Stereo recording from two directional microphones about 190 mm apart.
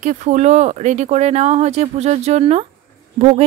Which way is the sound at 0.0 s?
40° right (ahead or behind).